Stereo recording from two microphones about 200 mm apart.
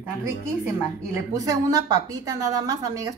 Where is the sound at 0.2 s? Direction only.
15° right (ahead or behind).